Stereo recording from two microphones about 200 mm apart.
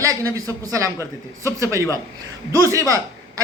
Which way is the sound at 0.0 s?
15° right (ahead or behind).